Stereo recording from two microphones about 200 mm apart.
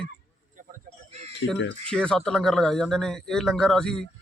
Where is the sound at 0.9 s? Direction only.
30° right (ahead or behind).